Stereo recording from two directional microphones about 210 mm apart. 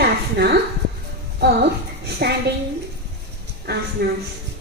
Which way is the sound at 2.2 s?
50° right (ahead or behind).